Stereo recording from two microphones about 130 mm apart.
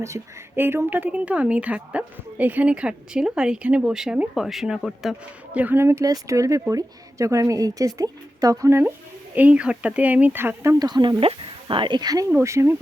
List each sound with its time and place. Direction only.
0.0 s a woman's voice: 20° right (ahead or behind); by 4.8 s 5° right (ahead or behind)
4.8 s speech: 5° left (ahead or behind)
5.5 s a woman's voice: 15° right (ahead or behind)
10.8 s speech: 35° right (ahead or behind)